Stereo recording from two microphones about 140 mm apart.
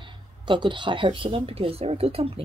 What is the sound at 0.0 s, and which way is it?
Speech, 35° right (ahead or behind).